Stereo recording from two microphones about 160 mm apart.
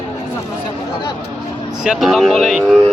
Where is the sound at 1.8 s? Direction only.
Centre (ahead or behind).